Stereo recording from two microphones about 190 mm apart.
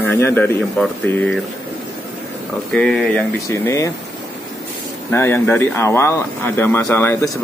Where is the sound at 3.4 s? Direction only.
15° left (ahead or behind).